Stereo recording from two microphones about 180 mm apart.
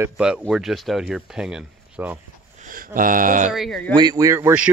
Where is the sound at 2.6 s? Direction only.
50° right (ahead or behind).